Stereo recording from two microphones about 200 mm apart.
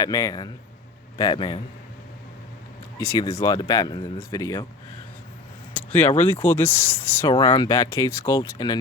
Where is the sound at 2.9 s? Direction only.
15° left (ahead or behind).